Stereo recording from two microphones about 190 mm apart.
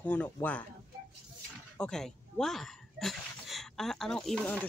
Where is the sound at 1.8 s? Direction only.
5° left (ahead or behind).